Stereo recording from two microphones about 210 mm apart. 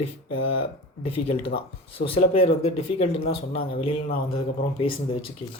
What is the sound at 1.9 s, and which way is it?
Speech, 25° left (ahead or behind).